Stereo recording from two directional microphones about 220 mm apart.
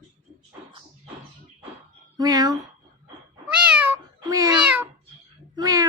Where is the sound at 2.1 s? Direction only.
15° right (ahead or behind).